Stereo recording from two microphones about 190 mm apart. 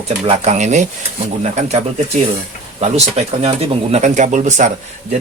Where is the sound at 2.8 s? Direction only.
35° right (ahead or behind).